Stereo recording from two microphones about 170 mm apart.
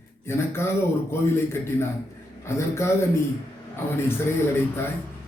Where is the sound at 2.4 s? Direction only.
15° left (ahead or behind).